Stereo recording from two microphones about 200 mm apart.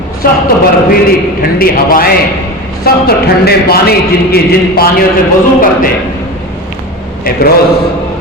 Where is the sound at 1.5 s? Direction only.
45° left (ahead or behind).